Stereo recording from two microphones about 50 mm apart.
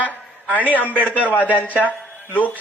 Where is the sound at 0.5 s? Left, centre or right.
Left.